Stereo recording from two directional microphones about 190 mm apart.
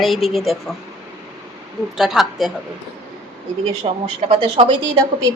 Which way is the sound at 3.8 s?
30° right (ahead or behind).